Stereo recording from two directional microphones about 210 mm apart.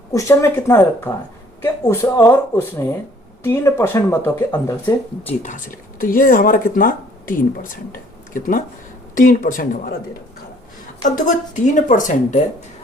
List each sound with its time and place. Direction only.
0.1 s speech: 15° left (ahead or behind)
5.4 s speech: 35° left (ahead or behind)
11.0 s speech: 35° left (ahead or behind)